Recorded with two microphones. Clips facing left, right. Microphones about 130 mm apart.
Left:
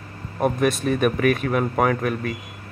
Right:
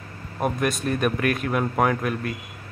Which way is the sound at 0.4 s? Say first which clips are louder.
Left 4 dB; centre (ahead or behind).